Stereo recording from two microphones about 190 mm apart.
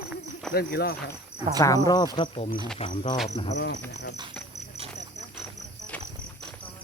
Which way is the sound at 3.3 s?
35° left (ahead or behind).